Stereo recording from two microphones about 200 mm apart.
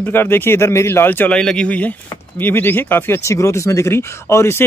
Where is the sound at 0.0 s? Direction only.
10° left (ahead or behind).